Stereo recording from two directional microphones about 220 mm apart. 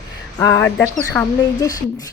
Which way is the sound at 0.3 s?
15° left (ahead or behind).